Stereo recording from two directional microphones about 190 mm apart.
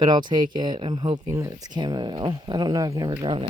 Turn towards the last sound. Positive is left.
turn(degrees=-25)  # may be behind; listen again after turning